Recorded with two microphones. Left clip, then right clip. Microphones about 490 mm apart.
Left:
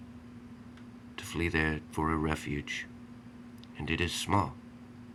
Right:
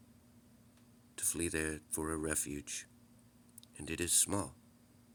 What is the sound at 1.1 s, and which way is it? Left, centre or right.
Speech, right.